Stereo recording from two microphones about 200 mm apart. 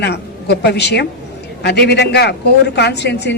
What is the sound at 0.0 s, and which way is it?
A woman's voice, 55° left (ahead or behind).